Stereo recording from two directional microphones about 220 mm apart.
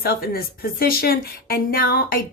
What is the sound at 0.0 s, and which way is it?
A woman's voice, 40° left (ahead or behind).